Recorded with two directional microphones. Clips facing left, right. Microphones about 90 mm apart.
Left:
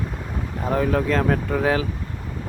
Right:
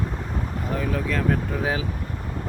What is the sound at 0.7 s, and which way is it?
Speech, 45° left (ahead or behind).